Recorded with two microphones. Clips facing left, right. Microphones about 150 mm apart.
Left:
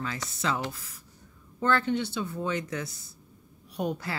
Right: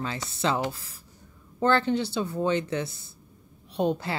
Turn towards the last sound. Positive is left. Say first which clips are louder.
# right 5 dB
turn(degrees=-25)  # may be behind; listen again after turning